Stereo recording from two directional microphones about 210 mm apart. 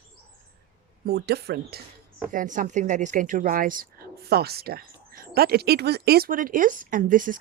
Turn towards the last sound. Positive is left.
turn(degrees=-40)  # may be behind; listen again after turning